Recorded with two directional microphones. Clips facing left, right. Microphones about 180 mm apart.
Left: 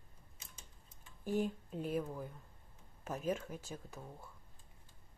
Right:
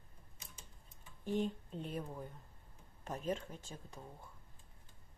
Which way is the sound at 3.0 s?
5° left (ahead or behind).